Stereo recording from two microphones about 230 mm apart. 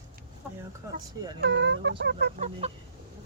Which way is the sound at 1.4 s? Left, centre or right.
Right.